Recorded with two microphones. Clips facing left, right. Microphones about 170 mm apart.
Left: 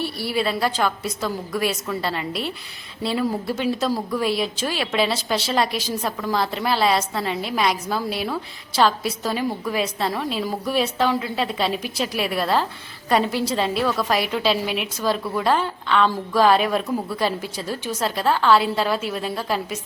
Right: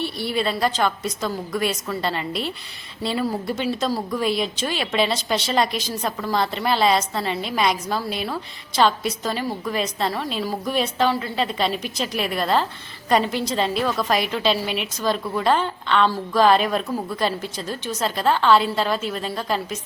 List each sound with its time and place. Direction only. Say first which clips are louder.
0.0 s a woman's voice: even; 5° left (ahead or behind)